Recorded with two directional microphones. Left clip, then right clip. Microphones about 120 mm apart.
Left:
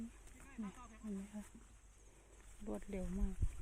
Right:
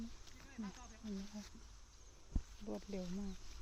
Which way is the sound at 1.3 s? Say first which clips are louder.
Even; 30° left (ahead or behind).